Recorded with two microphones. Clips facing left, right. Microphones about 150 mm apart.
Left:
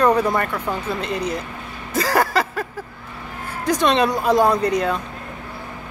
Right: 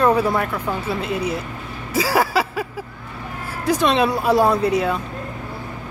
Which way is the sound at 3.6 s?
5° right (ahead or behind).